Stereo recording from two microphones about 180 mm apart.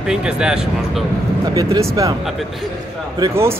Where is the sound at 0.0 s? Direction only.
5° right (ahead or behind).